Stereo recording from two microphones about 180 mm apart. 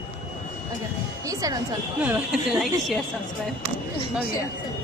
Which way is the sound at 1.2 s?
20° right (ahead or behind).